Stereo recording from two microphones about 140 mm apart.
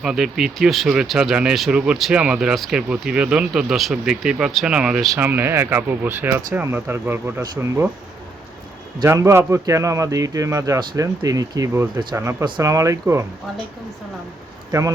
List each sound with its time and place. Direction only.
0.0 s speech: 5° right (ahead or behind)
5.1 s speech: 15° right (ahead or behind)
9.0 s speech: 20° right (ahead or behind)
14.7 s speech: 20° right (ahead or behind)